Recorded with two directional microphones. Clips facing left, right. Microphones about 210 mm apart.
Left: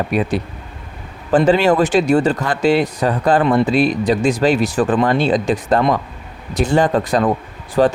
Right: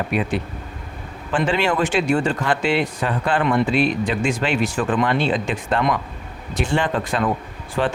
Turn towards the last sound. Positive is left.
turn(degrees=40)  # may be behind; listen again after turning